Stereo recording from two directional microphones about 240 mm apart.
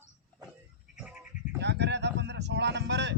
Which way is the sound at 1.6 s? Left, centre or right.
Right.